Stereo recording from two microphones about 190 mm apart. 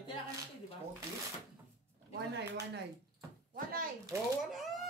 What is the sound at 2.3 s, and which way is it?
Speech, 65° right (ahead or behind).